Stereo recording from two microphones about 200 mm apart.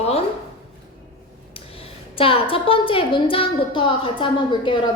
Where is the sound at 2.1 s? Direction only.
25° left (ahead or behind).